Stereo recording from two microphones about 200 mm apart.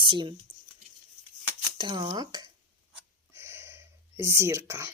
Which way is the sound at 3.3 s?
10° right (ahead or behind).